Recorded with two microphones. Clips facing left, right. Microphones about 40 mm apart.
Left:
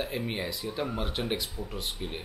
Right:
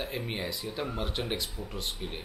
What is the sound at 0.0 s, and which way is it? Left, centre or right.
Speech, centre.